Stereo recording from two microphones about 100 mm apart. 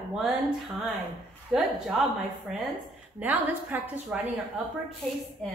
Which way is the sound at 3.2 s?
20° right (ahead or behind).